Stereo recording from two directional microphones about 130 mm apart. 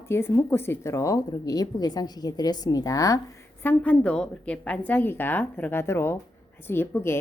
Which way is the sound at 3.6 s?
10° left (ahead or behind).